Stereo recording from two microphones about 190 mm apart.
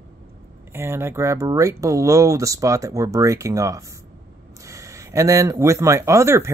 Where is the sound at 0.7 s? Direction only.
15° right (ahead or behind).